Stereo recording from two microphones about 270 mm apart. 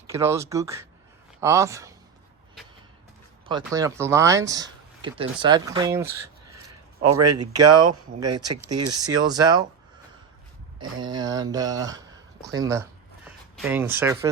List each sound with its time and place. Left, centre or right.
0.1 s speech: centre
3.7 s speech: centre
7.0 s speech: right
7.3 s speech: centre
11.0 s speech: centre